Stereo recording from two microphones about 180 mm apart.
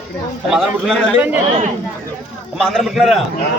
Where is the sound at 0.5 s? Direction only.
Centre (ahead or behind).